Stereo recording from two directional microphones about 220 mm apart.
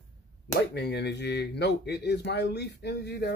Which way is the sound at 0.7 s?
50° left (ahead or behind).